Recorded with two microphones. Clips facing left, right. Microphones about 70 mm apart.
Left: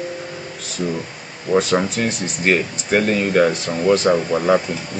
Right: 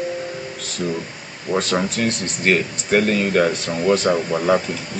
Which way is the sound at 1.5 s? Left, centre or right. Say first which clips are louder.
Left 3 dB; centre.